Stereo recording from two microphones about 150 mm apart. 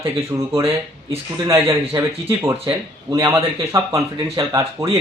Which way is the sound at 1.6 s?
40° right (ahead or behind).